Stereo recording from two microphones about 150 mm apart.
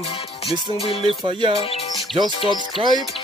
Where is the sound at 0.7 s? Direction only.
40° left (ahead or behind).